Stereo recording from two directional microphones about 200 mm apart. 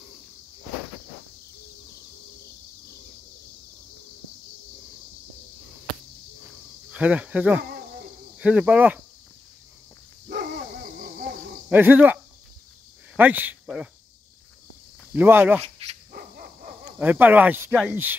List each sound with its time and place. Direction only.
6.9 s speech: 5° right (ahead or behind)
10.3 s dog: 50° right (ahead or behind)
11.7 s speech: 10° right (ahead or behind)
15.1 s speech: 10° right (ahead or behind)
15.8 s dog: 30° right (ahead or behind)
17.0 s speech: 10° right (ahead or behind)